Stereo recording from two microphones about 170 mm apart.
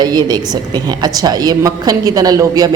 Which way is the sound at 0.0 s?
25° right (ahead or behind).